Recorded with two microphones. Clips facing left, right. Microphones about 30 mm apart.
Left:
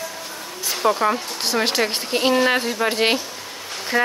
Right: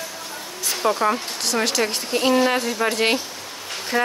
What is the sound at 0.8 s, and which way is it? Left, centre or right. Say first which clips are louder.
Speech: left 1 dB; centre.